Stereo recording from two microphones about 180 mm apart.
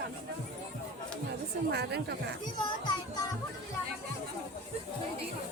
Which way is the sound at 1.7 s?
65° right (ahead or behind).